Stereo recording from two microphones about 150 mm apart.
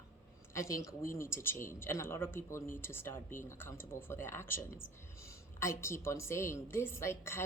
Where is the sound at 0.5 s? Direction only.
20° left (ahead or behind).